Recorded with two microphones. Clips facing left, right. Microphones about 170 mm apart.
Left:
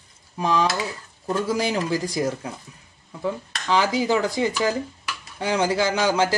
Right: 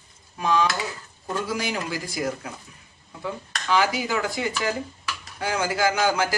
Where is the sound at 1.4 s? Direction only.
35° left (ahead or behind).